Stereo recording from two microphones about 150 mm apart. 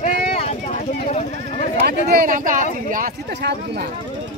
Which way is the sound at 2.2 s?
65° right (ahead or behind).